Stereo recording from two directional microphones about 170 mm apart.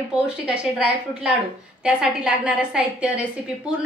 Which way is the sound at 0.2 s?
5° right (ahead or behind).